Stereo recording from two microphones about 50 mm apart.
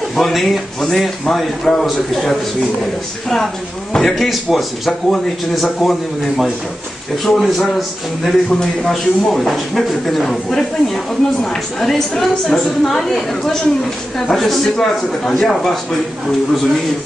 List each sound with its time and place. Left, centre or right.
0.1 s a man's voice: centre
3.9 s speech: centre
8.5 s a man's voice: centre
12.2 s a man's voice: centre